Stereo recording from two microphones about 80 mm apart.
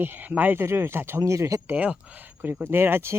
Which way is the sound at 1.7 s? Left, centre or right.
Centre.